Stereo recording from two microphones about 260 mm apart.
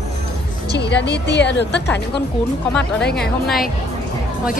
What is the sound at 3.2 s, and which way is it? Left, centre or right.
Speech, centre.